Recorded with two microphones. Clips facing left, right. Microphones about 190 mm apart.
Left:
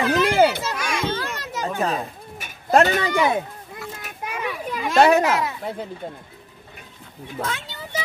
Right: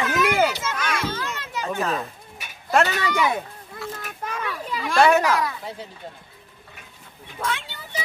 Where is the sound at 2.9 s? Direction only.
50° left (ahead or behind).